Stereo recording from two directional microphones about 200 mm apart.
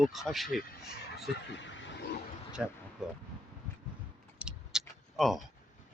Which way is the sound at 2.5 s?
5° right (ahead or behind).